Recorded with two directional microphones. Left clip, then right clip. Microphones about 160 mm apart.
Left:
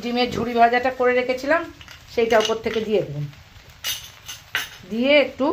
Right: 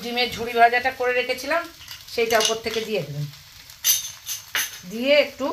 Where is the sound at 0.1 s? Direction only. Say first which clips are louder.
Left 1 dB; 50° left (ahead or behind).